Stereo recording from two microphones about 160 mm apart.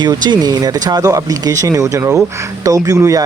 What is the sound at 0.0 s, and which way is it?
Speech, 25° right (ahead or behind).